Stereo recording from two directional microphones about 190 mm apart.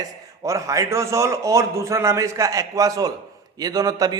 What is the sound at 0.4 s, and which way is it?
A man's voice, 15° right (ahead or behind).